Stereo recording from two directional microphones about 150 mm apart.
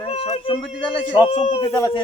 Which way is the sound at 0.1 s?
40° left (ahead or behind).